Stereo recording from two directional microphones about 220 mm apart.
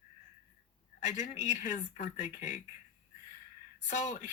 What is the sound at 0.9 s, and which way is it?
Speech, 35° left (ahead or behind).